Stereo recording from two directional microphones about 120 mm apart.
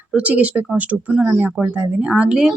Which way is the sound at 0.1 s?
10° right (ahead or behind).